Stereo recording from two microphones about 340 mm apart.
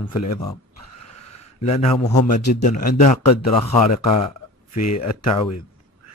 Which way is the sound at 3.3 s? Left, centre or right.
Left.